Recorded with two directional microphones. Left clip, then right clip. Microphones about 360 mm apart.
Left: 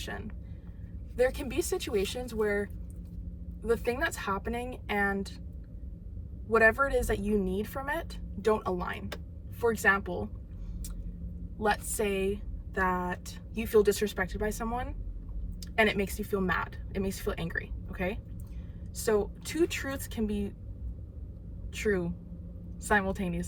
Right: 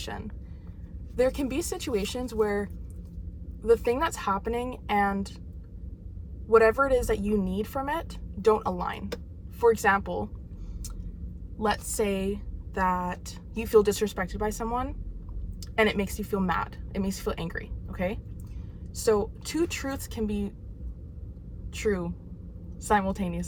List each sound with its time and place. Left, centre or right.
0.0 s a woman's voice: centre
3.7 s a woman's voice: centre
6.7 s a woman's voice: centre
12.1 s a woman's voice: centre
21.7 s a woman's voice: centre